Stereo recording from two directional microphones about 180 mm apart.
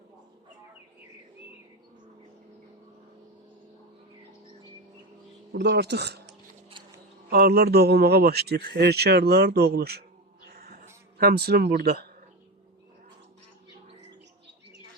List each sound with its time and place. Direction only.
5.5 s speech: 70° right (ahead or behind)
7.3 s a man's voice: 60° right (ahead or behind)
10.4 s cat: 60° right (ahead or behind)
11.2 s a man's voice: 60° right (ahead or behind)